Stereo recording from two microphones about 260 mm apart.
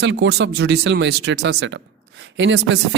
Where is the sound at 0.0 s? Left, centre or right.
Right.